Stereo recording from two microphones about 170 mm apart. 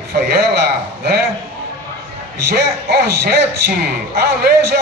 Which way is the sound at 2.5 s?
70° right (ahead or behind).